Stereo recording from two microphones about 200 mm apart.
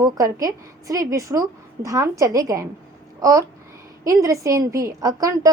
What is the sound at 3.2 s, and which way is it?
Babbling, 15° right (ahead or behind).